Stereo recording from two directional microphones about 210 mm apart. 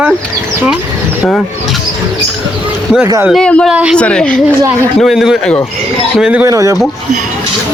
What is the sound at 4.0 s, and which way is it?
A man's voice, 5° left (ahead or behind).